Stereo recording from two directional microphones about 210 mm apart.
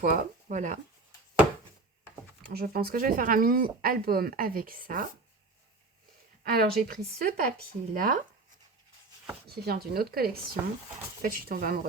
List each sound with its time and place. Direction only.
0.0 s speech: 40° right (ahead or behind)
2.5 s speech: 45° right (ahead or behind)
6.4 s speech: 45° right (ahead or behind)
9.5 s speech: 50° right (ahead or behind)